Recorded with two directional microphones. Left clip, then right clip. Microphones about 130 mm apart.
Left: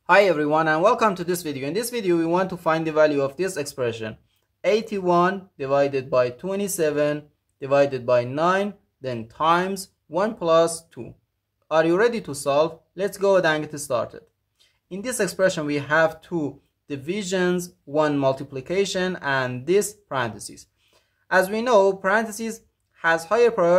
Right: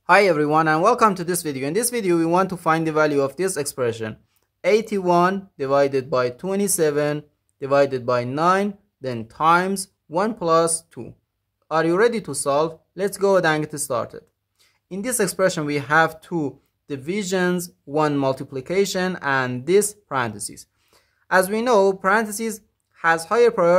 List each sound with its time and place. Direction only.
0.0 s speech: 35° right (ahead or behind)